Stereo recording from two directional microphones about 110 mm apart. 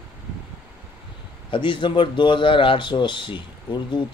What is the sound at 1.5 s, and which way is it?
Speech, 50° left (ahead or behind).